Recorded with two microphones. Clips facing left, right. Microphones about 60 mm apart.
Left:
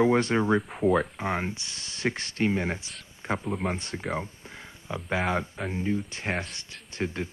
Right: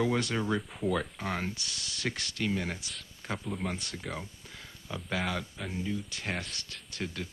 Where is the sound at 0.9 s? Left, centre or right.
Left.